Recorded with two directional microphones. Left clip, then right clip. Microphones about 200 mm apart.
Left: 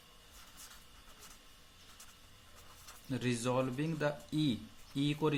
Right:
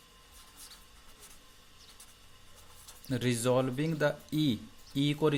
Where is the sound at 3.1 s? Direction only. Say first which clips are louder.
Right 6 dB; 40° right (ahead or behind).